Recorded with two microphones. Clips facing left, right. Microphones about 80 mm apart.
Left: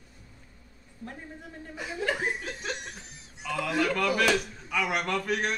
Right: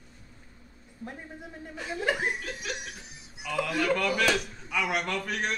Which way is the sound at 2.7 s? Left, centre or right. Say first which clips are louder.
Right 1 dB; centre.